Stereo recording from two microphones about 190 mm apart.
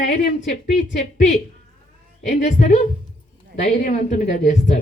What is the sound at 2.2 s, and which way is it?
A woman's voice, 40° left (ahead or behind).